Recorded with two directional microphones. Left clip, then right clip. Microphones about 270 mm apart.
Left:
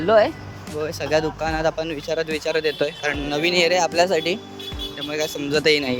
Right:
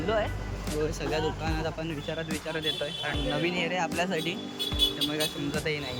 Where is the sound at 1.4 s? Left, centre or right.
Centre.